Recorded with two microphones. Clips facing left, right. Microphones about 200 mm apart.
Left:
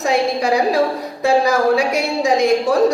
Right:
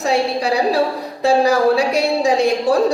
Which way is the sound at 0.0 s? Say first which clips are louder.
Left 1 dB; 35° right (ahead or behind).